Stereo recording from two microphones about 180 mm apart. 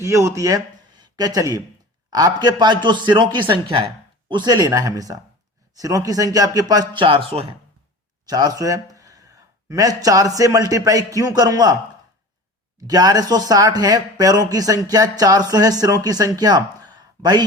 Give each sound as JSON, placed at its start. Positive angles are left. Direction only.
{"t": 0.0, "sound": "speech", "side_deg": -15}
{"t": 8.3, "sound": "speech", "side_deg": -20}
{"t": 12.9, "sound": "speech", "side_deg": -20}